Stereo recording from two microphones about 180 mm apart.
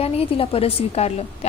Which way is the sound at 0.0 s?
30° left (ahead or behind).